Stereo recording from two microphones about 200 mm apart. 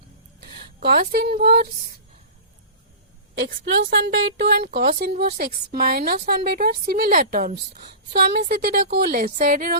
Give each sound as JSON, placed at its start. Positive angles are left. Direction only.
{"t": 0.3, "sound": "speech", "side_deg": -55}
{"t": 3.7, "sound": "a woman's voice", "side_deg": -60}